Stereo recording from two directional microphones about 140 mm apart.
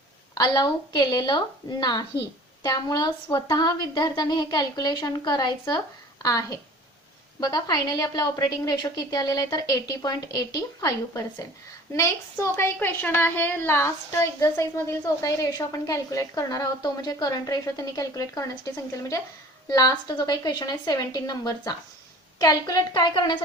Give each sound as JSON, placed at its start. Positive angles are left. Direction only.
{"t": 0.3, "sound": "a woman's voice", "side_deg": 30}